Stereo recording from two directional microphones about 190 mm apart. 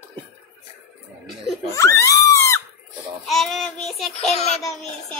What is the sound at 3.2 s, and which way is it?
Child singing, centre (ahead or behind).